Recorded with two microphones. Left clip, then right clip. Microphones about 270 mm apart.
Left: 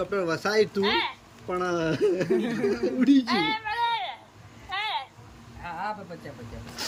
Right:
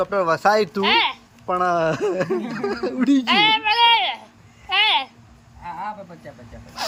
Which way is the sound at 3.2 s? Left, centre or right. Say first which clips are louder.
Right 10 dB; right.